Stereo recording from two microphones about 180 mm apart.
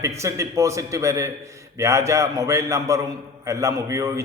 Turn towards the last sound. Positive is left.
turn(degrees=-15)  # may be behind; listen again after turning